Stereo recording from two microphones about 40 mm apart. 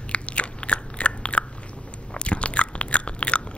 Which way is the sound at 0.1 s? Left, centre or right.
Left.